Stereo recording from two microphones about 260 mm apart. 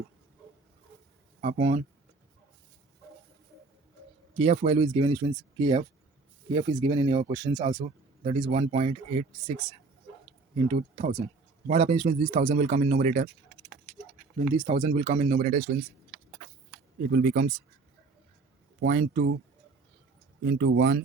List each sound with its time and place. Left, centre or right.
1.4 s speech: right
4.4 s speech: right
7.7 s speech: right
14.5 s speech: centre
17.1 s speech: right
18.8 s speech: right
20.4 s speech: right